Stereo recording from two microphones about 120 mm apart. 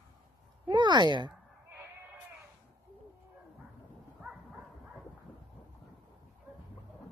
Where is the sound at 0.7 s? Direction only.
40° right (ahead or behind).